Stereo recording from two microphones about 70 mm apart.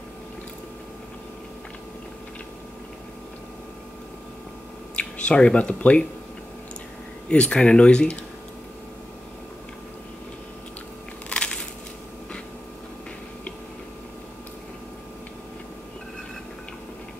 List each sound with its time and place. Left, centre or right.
4.9 s speech: centre
7.2 s speech: centre
11.2 s crushing: centre